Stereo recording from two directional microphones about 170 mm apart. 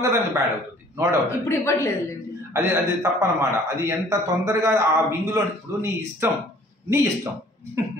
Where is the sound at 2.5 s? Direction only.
20° right (ahead or behind).